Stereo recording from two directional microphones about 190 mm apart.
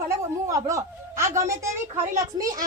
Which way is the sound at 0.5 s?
15° right (ahead or behind).